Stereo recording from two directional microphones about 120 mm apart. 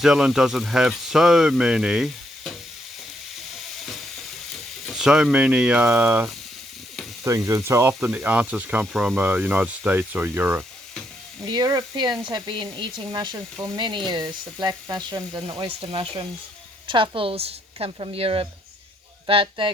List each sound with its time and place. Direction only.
0.0 s speech: 5° right (ahead or behind)
3.5 s frying: centre (ahead or behind)
4.5 s speech: centre (ahead or behind)
7.3 s speech: 25° right (ahead or behind)
11.4 s a woman's voice: 35° right (ahead or behind)